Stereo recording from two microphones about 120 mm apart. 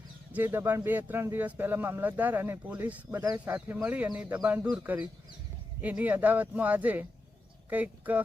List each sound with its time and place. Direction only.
0.3 s speech: 15° right (ahead or behind)